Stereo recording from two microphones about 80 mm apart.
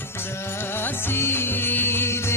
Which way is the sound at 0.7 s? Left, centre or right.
Left.